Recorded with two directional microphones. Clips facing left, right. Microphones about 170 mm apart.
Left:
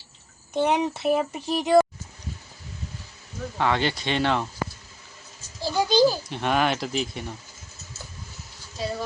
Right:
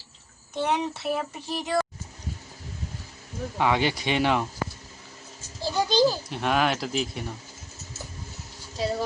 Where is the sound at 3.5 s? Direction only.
10° right (ahead or behind).